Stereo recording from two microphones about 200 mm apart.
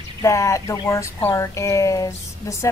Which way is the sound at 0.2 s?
15° left (ahead or behind).